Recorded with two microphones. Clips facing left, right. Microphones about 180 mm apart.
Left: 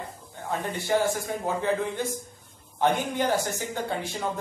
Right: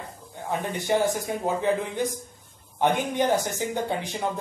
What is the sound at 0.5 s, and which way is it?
A man's voice, 15° right (ahead or behind).